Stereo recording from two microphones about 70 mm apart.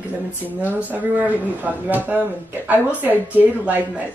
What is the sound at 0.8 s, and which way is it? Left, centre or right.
Speech, right.